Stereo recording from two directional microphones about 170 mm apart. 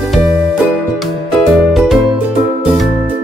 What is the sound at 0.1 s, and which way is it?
Music, centre (ahead or behind).